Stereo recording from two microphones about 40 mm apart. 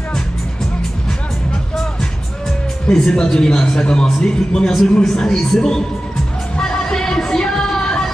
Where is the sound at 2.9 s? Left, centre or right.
Centre.